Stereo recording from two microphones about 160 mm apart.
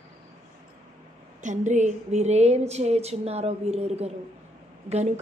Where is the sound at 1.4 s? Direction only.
50° right (ahead or behind).